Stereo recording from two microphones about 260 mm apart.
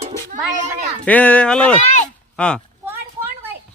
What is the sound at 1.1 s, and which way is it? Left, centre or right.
Speech, centre.